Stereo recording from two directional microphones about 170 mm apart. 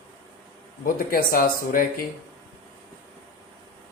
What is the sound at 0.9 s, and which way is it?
Speech, 55° left (ahead or behind).